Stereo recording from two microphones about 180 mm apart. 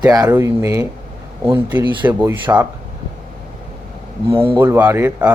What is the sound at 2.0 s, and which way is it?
Speech, 10° right (ahead or behind).